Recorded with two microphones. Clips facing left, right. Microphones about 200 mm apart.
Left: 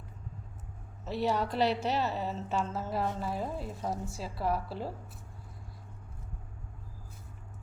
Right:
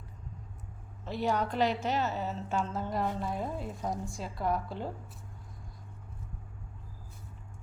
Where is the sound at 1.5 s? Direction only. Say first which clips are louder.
Left 1 dB; 35° left (ahead or behind).